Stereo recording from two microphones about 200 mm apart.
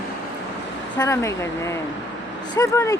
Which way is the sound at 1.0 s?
15° left (ahead or behind).